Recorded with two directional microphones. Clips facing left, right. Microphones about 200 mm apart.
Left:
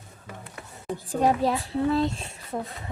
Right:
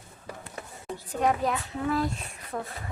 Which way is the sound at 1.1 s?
30° left (ahead or behind).